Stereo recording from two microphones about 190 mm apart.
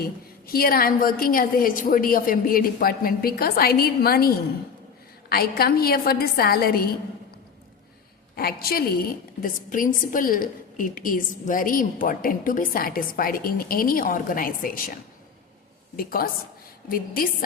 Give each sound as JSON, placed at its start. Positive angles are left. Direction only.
{"t": 0.0, "sound": "a woman's voice", "side_deg": 50}
{"t": 5.3, "sound": "a woman's voice", "side_deg": 55}
{"t": 8.4, "sound": "a woman's voice", "side_deg": 55}
{"t": 16.0, "sound": "a woman's voice", "side_deg": 50}